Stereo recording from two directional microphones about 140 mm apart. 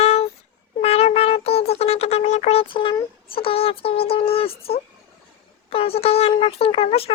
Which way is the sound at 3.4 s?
40° left (ahead or behind).